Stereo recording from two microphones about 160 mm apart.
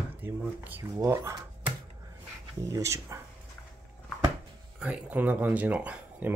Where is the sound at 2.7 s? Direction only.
20° right (ahead or behind).